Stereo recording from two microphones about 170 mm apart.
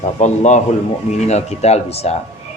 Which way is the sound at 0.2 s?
45° left (ahead or behind).